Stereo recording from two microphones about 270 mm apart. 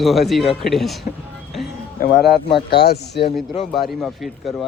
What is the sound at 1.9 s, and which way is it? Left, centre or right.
Speech, left.